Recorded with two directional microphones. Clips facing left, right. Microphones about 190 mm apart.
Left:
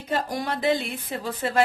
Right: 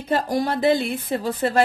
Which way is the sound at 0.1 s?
35° right (ahead or behind).